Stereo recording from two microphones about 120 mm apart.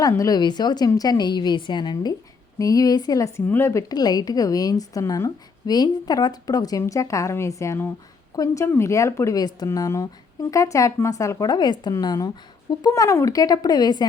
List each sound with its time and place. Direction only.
0.1 s a woman's voice: 30° left (ahead or behind)